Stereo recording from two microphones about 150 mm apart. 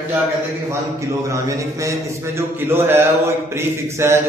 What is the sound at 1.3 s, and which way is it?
A man's voice, 20° right (ahead or behind).